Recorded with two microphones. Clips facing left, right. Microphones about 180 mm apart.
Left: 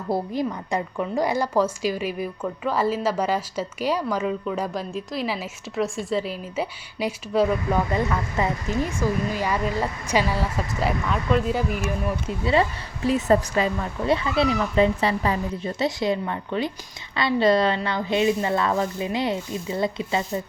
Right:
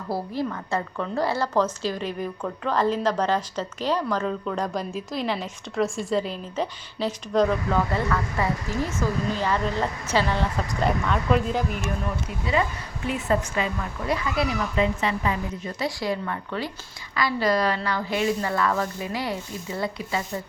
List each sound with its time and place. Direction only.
0.1 s a woman's voice: 15° left (ahead or behind)
13.1 s a woman's voice: 35° left (ahead or behind)
14.1 s a woman's voice: 25° left (ahead or behind)